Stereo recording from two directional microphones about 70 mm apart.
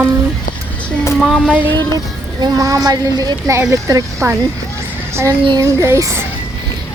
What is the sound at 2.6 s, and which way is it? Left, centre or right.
Speech, right.